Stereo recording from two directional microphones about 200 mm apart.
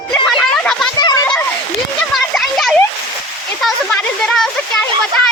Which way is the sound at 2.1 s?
Centre (ahead or behind).